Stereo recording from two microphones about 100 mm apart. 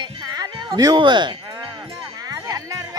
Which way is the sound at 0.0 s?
40° right (ahead or behind).